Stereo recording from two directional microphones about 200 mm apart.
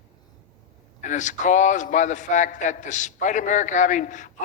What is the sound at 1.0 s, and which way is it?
A man's voice, 40° left (ahead or behind).